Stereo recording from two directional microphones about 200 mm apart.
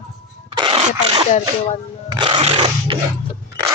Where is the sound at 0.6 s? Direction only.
25° right (ahead or behind).